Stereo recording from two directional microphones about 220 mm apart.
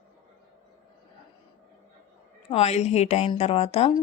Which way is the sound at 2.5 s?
30° left (ahead or behind).